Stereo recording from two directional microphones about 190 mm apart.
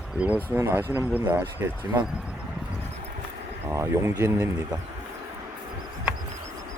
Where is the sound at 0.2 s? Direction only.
5° right (ahead or behind).